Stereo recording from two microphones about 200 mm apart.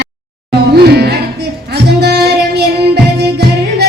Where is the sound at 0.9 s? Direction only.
55° right (ahead or behind).